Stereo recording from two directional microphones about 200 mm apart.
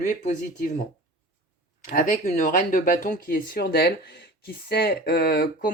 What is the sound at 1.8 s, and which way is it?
Speech, 40° left (ahead or behind).